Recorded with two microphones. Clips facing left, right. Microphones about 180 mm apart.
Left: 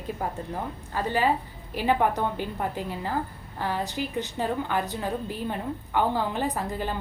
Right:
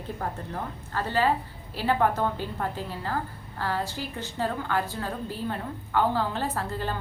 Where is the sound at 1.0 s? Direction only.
15° left (ahead or behind).